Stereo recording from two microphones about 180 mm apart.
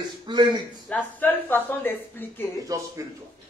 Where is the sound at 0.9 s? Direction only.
10° left (ahead or behind).